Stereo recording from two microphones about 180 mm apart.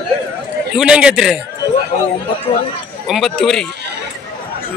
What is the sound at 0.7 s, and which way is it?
Speech, 5° right (ahead or behind).